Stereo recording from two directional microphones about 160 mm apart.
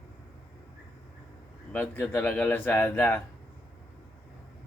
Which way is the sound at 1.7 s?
10° left (ahead or behind).